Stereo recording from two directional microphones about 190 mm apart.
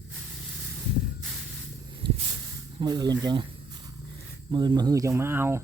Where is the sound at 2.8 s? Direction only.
20° right (ahead or behind).